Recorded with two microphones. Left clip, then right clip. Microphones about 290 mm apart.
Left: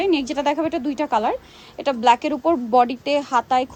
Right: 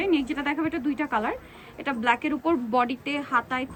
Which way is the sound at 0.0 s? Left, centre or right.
Centre.